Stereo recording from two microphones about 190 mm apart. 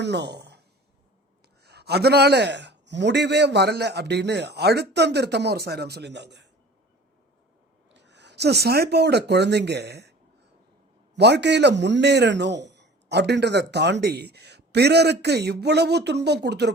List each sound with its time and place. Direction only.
0.0 s speech: 60° right (ahead or behind)
1.6 s a man's voice: 60° right (ahead or behind)
7.9 s a man's voice: 65° right (ahead or behind)